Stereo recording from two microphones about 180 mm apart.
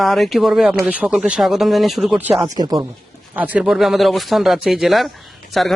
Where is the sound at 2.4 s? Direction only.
20° right (ahead or behind).